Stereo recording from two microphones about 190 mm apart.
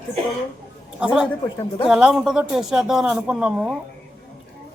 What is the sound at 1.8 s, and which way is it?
A man's voice, 5° right (ahead or behind).